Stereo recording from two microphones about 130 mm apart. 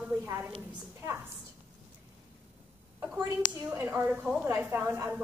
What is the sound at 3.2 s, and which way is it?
A woman's voice, 15° right (ahead or behind).